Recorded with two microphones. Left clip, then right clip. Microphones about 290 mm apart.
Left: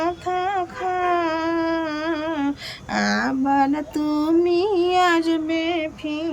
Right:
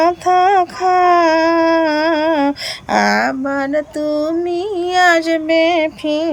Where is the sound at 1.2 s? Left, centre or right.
Centre.